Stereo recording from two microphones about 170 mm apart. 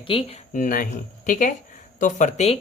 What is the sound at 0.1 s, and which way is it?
Speech, 35° left (ahead or behind).